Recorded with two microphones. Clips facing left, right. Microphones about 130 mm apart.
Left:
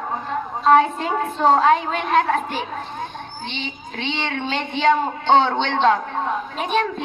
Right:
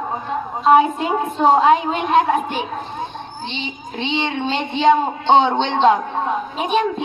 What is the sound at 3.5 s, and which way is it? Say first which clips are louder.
Speech: right 2 dB; 15° right (ahead or behind).